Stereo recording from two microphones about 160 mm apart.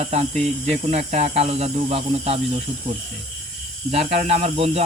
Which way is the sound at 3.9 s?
40° right (ahead or behind).